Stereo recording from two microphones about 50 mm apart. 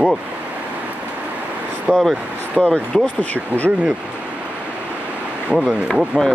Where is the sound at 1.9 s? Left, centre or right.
Right.